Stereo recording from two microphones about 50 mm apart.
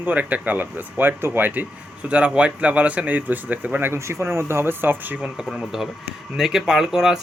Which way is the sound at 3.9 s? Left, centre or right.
Right.